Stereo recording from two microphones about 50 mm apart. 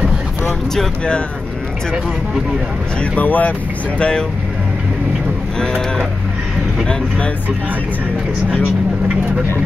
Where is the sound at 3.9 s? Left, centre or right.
Left.